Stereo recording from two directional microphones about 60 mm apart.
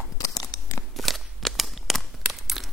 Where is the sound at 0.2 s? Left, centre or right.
Left.